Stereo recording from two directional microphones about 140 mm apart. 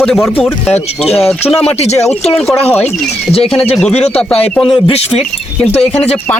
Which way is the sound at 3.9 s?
50° left (ahead or behind).